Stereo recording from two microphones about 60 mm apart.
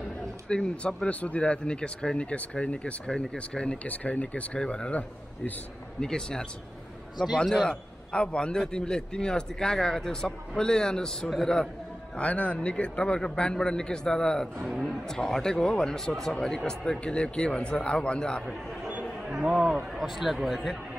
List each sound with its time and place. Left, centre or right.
0.5 s a man's voice: centre
12.2 s a man's voice: left
19.4 s a man's voice: centre
20.0 s speech: centre